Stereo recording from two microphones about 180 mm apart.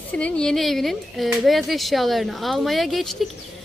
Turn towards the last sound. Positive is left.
turn(degrees=0)  # may be behind; listen again after turning